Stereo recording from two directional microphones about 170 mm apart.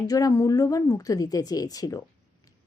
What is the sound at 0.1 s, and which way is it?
Speech, 20° left (ahead or behind).